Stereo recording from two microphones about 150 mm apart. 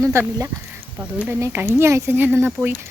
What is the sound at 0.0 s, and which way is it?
Speech, 20° right (ahead or behind).